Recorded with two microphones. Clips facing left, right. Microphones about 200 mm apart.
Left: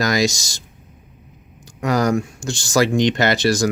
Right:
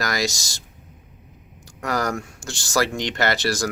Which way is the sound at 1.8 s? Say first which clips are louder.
Left 7 dB; 20° left (ahead or behind).